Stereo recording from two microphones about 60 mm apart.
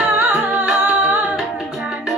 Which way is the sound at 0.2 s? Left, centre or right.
Right.